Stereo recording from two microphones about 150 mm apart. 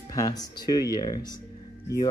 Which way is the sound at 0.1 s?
25° left (ahead or behind).